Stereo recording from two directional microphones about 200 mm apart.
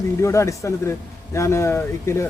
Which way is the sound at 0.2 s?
15° left (ahead or behind).